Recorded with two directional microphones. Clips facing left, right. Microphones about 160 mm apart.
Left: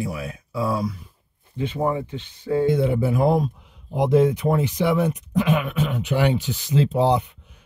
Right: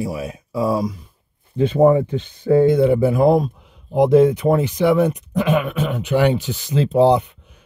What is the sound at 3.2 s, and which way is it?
Speech, 50° right (ahead or behind).